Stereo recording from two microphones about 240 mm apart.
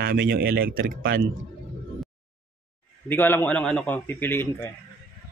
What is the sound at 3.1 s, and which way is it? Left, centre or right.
A man's voice, centre.